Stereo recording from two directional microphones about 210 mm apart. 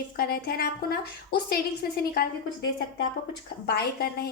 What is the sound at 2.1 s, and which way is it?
A woman's voice, 55° left (ahead or behind).